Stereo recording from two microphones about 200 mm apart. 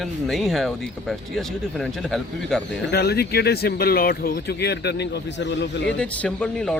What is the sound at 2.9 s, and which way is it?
Speech, 50° left (ahead or behind).